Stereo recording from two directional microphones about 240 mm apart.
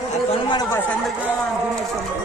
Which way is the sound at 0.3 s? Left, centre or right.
Centre.